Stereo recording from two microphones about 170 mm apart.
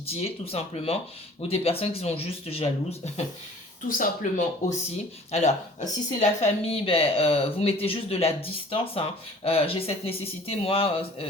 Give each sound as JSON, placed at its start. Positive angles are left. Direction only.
{"t": 0.0, "sound": "speech", "side_deg": 35}
{"t": 3.8, "sound": "speech", "side_deg": 50}